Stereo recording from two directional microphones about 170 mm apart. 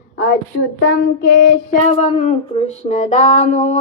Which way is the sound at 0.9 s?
70° left (ahead or behind).